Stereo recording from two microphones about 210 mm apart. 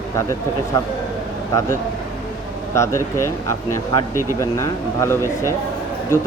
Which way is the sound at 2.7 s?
15° left (ahead or behind).